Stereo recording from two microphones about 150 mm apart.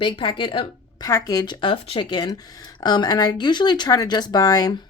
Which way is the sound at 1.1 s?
20° left (ahead or behind).